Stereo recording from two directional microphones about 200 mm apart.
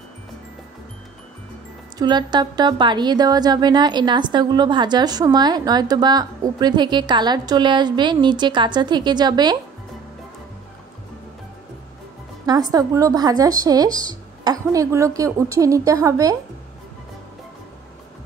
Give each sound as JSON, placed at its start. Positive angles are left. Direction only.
{"t": 2.0, "sound": "a woman's voice", "side_deg": -20}
{"t": 12.4, "sound": "speech", "side_deg": -20}